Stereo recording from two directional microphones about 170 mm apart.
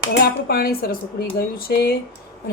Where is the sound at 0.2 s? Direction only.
65° left (ahead or behind).